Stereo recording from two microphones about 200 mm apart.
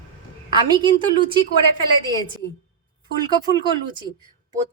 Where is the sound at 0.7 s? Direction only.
25° right (ahead or behind).